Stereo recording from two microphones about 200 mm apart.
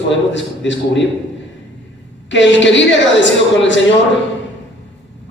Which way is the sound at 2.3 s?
65° left (ahead or behind).